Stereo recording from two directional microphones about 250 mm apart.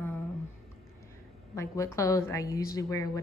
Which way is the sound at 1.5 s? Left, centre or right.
Centre.